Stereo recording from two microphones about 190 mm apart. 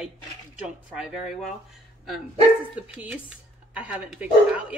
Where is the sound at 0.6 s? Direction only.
5° right (ahead or behind).